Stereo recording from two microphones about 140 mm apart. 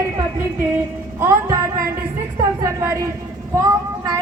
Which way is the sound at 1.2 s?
20° right (ahead or behind).